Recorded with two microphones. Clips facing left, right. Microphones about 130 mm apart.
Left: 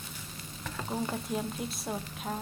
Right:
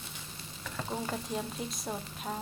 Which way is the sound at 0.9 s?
Centre (ahead or behind).